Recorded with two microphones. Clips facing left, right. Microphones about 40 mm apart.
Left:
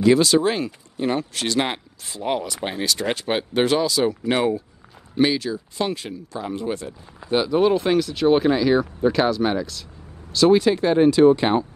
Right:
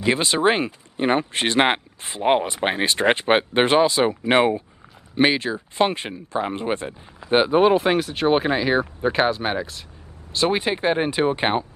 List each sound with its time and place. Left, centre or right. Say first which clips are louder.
0.0 s speech: left 3 dB; right